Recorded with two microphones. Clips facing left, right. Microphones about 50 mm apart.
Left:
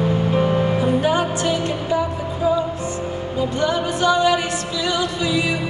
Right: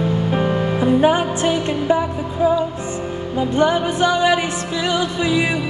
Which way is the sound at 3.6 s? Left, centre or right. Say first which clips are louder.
Right 5 dB; right.